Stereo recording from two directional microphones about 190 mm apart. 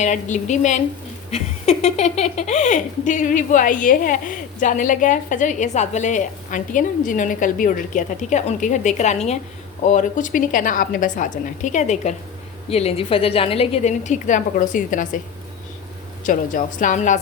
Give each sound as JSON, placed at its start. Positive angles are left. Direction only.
{"t": 0.0, "sound": "a woman's voice", "side_deg": 40}
{"t": 16.2, "sound": "speech", "side_deg": 45}